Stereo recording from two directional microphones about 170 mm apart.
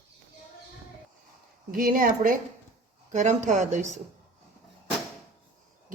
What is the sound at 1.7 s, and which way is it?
Speech, 55° right (ahead or behind).